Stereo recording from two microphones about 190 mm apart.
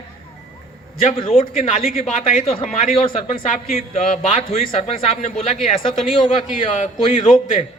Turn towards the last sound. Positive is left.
turn(degrees=40)  # may be behind; listen again after turning